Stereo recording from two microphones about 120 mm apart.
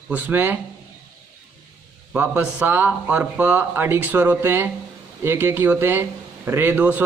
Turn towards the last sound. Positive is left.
turn(degrees=-15)  # may be behind; listen again after turning